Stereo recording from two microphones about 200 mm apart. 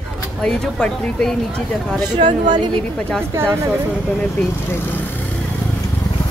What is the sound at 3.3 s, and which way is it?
Speech, 15° right (ahead or behind).